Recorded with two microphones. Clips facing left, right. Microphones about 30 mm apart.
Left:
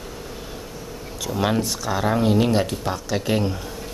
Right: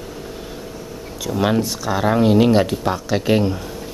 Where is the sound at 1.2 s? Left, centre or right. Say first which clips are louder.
Right 4 dB; centre.